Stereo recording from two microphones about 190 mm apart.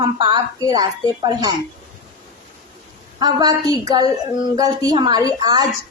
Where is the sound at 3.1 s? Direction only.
20° right (ahead or behind).